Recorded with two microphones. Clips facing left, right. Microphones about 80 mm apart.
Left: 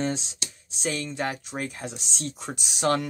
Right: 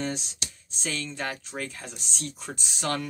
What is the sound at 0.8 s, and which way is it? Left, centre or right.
Speech, centre.